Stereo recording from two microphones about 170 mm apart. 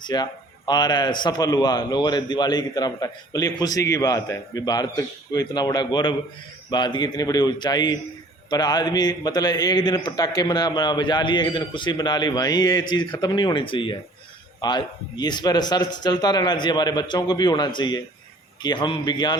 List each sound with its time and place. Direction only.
0.0 s a man's voice: 25° left (ahead or behind)